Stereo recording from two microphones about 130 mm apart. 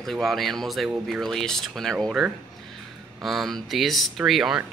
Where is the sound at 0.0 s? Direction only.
Centre (ahead or behind).